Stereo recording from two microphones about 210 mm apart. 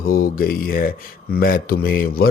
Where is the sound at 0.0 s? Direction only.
45° left (ahead or behind).